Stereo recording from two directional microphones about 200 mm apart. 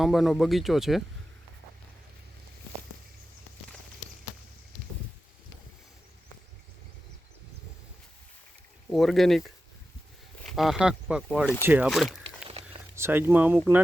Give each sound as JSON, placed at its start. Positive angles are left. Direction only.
{"t": 0.0, "sound": "speech", "side_deg": 0}
{"t": 8.9, "sound": "speech", "side_deg": 0}
{"t": 10.5, "sound": "speech", "side_deg": 0}
{"t": 12.5, "sound": "a sound", "side_deg": -25}
{"t": 13.0, "sound": "speech", "side_deg": -10}